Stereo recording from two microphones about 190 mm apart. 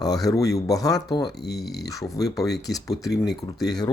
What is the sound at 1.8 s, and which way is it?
Speech, 20° left (ahead or behind).